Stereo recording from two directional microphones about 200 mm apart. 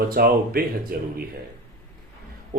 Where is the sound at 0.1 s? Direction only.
50° right (ahead or behind).